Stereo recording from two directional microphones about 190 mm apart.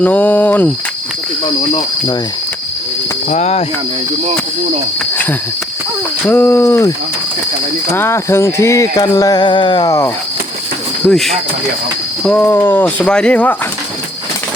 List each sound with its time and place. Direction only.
0.0 s speech: 10° left (ahead or behind)
3.2 s speech: 35° left (ahead or behind)
6.2 s speech: 10° left (ahead or behind)
7.9 s speech: 15° left (ahead or behind)
11.0 s speech: centre (ahead or behind)